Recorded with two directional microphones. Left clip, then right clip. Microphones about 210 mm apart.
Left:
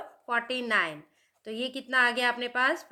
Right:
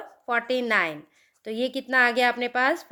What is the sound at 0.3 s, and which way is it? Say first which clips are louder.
Speech: right 4 dB; 35° right (ahead or behind).